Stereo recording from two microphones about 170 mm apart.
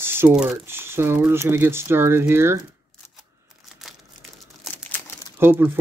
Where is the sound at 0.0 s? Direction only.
15° right (ahead or behind).